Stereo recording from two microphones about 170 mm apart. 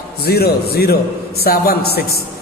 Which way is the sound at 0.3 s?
70° left (ahead or behind).